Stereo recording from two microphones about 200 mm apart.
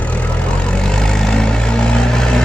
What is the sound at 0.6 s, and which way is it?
Vehicle, 5° left (ahead or behind).